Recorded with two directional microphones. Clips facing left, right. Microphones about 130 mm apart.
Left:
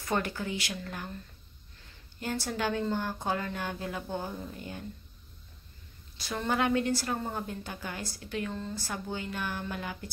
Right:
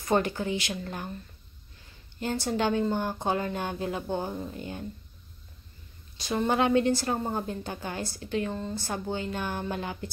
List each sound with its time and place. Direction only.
0.0 s a woman's voice: 25° right (ahead or behind)
2.1 s a woman's voice: 25° right (ahead or behind)
6.1 s a woman's voice: 20° right (ahead or behind)